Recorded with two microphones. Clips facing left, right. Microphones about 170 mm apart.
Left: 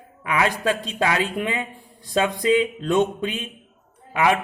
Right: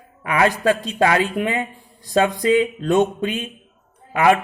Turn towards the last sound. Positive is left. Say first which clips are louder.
# right 4 dB
turn(degrees=-45)  # may be behind; listen again after turning